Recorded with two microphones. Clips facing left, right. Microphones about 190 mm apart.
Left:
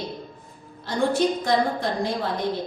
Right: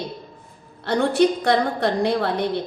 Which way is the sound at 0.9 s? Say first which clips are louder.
Right 4 dB; 65° right (ahead or behind).